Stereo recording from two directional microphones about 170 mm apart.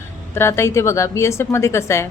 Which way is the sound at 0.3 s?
15° left (ahead or behind).